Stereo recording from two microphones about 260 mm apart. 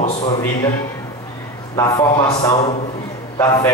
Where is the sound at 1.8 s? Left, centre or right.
Centre.